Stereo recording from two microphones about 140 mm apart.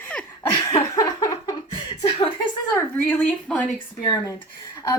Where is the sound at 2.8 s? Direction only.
10° left (ahead or behind).